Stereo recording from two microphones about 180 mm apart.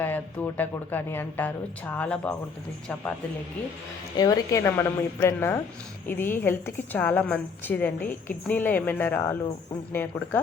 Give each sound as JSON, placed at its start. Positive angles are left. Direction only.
{"t": 0.0, "sound": "a woman's voice", "side_deg": 10}
{"t": 4.2, "sound": "a woman's voice", "side_deg": 20}